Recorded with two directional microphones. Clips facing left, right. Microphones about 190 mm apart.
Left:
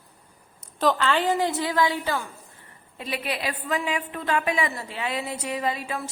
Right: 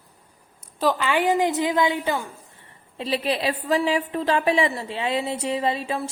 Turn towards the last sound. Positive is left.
turn(degrees=-30)  # may be behind; listen again after turning